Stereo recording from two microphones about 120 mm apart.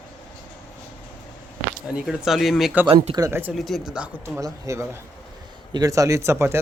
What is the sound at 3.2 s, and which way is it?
Speech, 20° right (ahead or behind).